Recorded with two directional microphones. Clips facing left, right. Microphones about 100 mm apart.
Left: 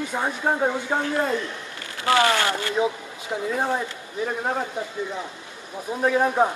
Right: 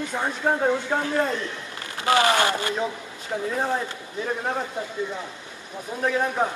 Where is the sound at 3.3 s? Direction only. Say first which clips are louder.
Even; 10° left (ahead or behind).